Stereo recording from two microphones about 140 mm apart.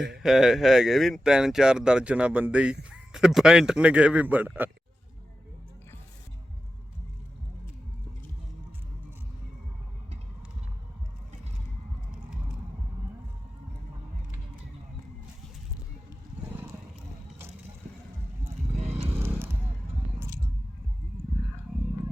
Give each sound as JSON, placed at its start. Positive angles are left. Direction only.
{"t": 0.0, "sound": "speech", "side_deg": -5}
{"t": 18.9, "sound": "vehicle", "side_deg": -15}
{"t": 20.1, "sound": "a sound", "side_deg": -20}